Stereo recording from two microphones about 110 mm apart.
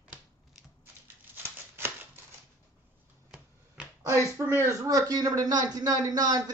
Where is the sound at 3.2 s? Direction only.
10° right (ahead or behind).